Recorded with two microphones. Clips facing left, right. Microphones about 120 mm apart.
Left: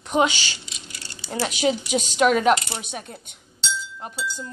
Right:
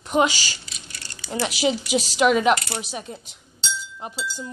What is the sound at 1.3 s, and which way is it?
A woman's voice, 5° right (ahead or behind).